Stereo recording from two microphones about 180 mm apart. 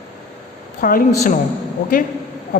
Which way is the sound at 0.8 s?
50° left (ahead or behind).